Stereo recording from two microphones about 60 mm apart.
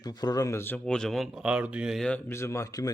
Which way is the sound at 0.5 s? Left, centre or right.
Left.